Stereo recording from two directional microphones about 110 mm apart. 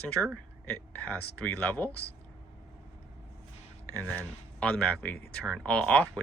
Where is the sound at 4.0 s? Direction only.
15° left (ahead or behind).